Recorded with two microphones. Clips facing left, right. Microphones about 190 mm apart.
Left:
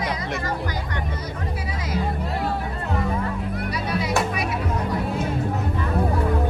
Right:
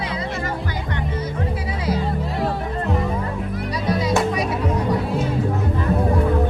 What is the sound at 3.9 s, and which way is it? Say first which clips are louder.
Music: right 5 dB; 35° right (ahead or behind).